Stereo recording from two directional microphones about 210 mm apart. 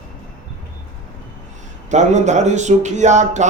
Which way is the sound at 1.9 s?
35° right (ahead or behind).